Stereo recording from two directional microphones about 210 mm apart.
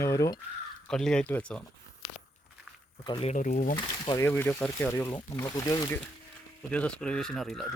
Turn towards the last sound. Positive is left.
turn(degrees=0)  # may be behind; listen again after turning